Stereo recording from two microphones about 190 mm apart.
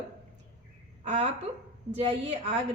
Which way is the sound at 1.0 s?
35° right (ahead or behind).